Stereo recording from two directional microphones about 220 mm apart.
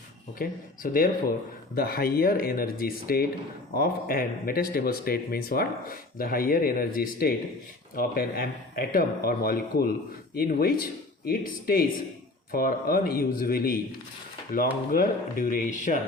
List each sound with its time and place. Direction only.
0.3 s speech: 40° left (ahead or behind)
14.8 s speech: 40° left (ahead or behind)